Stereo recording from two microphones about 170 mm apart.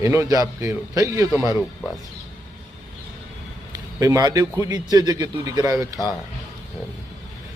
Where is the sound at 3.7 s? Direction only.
20° right (ahead or behind).